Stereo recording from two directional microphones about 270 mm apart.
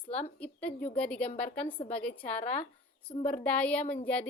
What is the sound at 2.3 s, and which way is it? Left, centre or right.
Speech, left.